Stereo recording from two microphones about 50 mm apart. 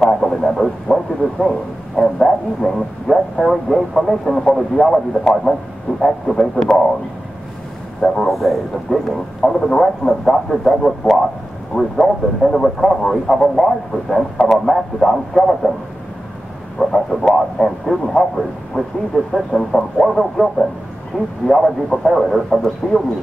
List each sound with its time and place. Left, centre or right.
0.0 s a sound: centre
1.5 s speech: centre
8.2 s speech: centre
16.8 s speech: left
17.2 s speech: centre
21.1 s a man's voice: centre
21.5 s speech: centre